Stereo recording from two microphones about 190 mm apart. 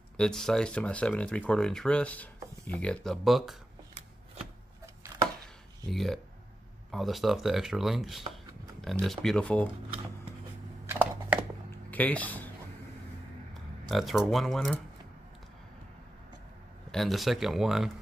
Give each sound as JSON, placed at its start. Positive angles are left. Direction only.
{"t": 0.2, "sound": "speech", "side_deg": 5}
{"t": 4.8, "sound": "chopping", "side_deg": -15}
{"t": 5.9, "sound": "speech", "side_deg": 0}
{"t": 10.9, "sound": "typing", "side_deg": -10}
{"t": 11.7, "sound": "a sound", "side_deg": 10}
{"t": 13.8, "sound": "speech", "side_deg": 0}
{"t": 16.9, "sound": "speech", "side_deg": 0}